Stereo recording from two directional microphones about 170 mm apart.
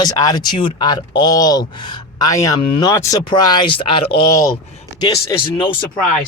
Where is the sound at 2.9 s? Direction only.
15° left (ahead or behind).